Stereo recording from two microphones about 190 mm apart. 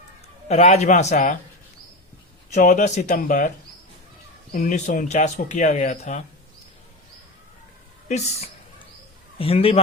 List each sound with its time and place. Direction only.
0.4 s speech: 35° left (ahead or behind)
2.5 s speech: 40° left (ahead or behind)
4.5 s speech: 45° left (ahead or behind)
8.0 s a woman's voice: 35° left (ahead or behind)